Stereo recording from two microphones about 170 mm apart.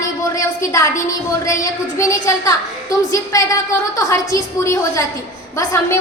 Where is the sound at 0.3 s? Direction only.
20° left (ahead or behind).